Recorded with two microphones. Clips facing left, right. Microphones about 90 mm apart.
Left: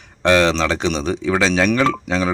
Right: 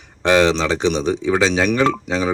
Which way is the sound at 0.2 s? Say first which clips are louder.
Even; 10° right (ahead or behind).